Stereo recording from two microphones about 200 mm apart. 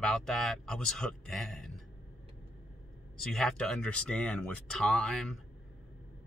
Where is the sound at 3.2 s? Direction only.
Centre (ahead or behind).